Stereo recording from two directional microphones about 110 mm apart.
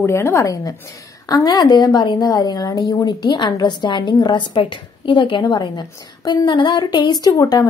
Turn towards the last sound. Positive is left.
turn(degrees=35)  # may be behind; listen again after turning